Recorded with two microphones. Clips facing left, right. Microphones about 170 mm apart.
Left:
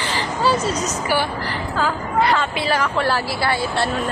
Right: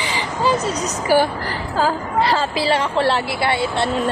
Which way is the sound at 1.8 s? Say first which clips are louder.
Right 2 dB; 30° right (ahead or behind).